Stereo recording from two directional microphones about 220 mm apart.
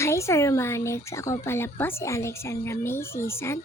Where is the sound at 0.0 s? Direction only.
10° left (ahead or behind).